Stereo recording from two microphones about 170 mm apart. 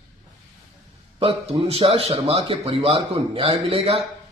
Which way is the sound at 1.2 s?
35° right (ahead or behind).